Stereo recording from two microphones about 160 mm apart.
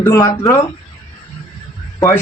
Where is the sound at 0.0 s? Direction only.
15° left (ahead or behind).